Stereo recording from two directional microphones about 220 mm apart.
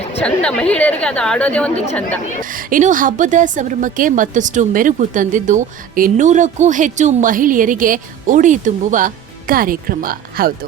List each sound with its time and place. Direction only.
0.2 s a woman's voice: 5° left (ahead or behind)
1.7 s speech: 30° left (ahead or behind)
2.4 s a woman's voice: 40° right (ahead or behind)